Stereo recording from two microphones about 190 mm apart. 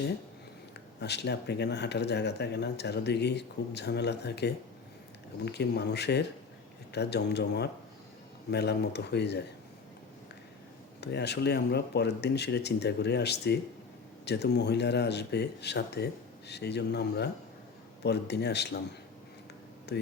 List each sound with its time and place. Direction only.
0.9 s speech: 60° left (ahead or behind)
11.0 s speech: 60° left (ahead or behind)
19.9 s speech: 60° left (ahead or behind)